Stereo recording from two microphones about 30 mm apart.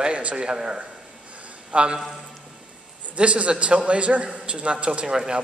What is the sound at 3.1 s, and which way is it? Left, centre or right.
A man's voice, right.